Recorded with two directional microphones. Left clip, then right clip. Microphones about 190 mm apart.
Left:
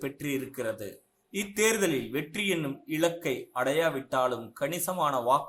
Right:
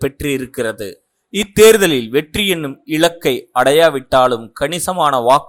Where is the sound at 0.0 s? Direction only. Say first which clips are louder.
Right 14 dB; 45° right (ahead or behind).